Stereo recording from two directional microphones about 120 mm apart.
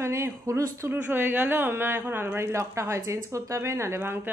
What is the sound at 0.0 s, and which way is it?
A woman's voice, 25° right (ahead or behind).